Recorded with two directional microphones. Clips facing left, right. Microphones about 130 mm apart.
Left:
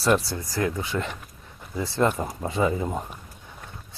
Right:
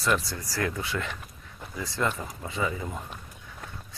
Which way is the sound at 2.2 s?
40° left (ahead or behind).